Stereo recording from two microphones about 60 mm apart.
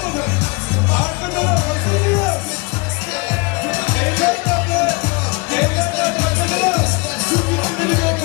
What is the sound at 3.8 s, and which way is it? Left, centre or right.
Music, left.